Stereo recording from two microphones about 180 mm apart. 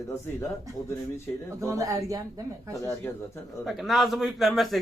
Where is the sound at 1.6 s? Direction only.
20° right (ahead or behind).